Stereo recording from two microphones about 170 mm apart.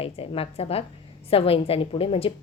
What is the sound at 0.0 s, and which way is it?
A woman's voice, 35° left (ahead or behind).